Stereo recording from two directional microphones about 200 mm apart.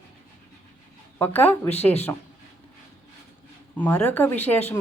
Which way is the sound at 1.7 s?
30° left (ahead or behind).